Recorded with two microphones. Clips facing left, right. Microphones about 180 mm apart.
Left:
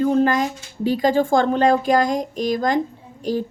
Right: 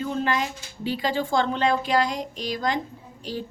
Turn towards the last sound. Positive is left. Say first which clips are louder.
# left 9 dB
turn(degrees=45)  # may be behind; listen again after turning